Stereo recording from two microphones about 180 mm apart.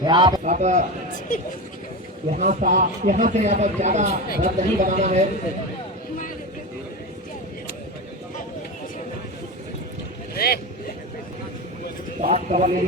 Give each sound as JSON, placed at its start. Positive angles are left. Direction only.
{"t": 0.0, "sound": "a man's voice", "side_deg": -25}
{"t": 0.4, "sound": "speech", "side_deg": -40}
{"t": 2.3, "sound": "a man's voice", "side_deg": -40}
{"t": 10.3, "sound": "speech", "side_deg": 60}
{"t": 12.2, "sound": "a man's voice", "side_deg": -40}